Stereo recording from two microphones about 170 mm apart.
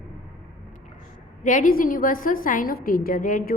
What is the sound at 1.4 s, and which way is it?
A woman's voice, 50° left (ahead or behind).